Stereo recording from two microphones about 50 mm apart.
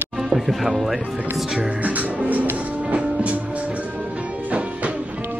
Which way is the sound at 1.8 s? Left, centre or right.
Right.